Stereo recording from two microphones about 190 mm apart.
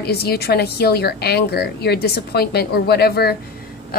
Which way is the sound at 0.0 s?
55° left (ahead or behind).